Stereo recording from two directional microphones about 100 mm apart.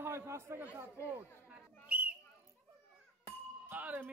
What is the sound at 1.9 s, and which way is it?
Whistle, 10° right (ahead or behind).